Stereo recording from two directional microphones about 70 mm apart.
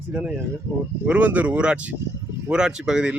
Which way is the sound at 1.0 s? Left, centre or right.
Right.